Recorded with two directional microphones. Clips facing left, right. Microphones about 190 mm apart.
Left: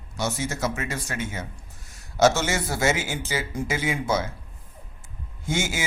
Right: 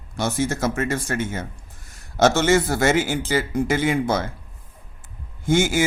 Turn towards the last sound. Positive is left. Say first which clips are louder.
# right 9 dB
turn(degrees=-55)  # may be behind; listen again after turning